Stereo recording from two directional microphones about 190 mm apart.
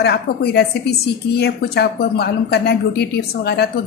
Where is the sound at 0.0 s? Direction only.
60° left (ahead or behind).